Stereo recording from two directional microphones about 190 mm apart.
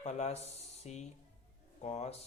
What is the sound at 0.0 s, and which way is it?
Speech, 35° left (ahead or behind).